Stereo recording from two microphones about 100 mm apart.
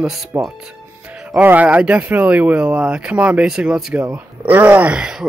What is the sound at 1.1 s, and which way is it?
Music, 10° right (ahead or behind).